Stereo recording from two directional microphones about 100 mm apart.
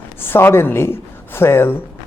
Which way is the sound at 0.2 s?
20° left (ahead or behind).